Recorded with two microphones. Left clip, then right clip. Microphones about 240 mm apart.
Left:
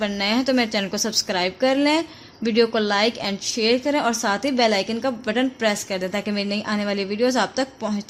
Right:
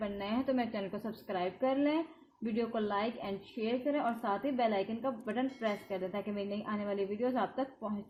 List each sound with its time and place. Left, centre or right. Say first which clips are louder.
0.0 s a woman's voice: left 14 dB; left